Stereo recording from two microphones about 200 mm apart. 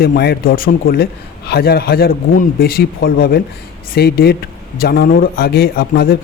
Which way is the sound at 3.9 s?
50° left (ahead or behind).